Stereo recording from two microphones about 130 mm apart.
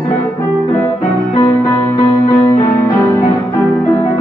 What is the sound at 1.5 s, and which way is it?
Music, 10° left (ahead or behind).